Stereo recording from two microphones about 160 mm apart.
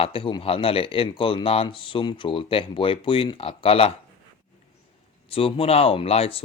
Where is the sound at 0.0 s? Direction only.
35° left (ahead or behind).